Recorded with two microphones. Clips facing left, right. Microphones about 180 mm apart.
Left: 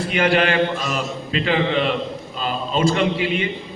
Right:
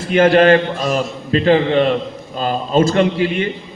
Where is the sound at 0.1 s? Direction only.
40° right (ahead or behind).